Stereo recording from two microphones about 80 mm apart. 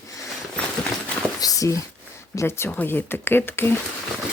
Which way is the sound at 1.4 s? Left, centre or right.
Left.